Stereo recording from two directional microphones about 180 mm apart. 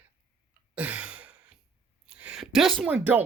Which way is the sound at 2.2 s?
5° right (ahead or behind).